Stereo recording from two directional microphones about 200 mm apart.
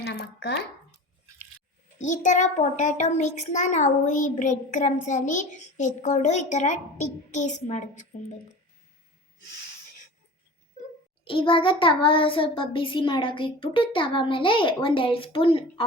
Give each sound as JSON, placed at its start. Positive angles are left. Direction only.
{"t": 0.0, "sound": "a sound", "side_deg": 55}
{"t": 2.0, "sound": "a child's voice", "side_deg": 40}
{"t": 11.3, "sound": "a child's voice", "side_deg": 25}